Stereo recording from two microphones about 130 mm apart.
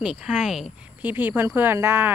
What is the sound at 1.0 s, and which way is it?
Speech, 15° right (ahead or behind).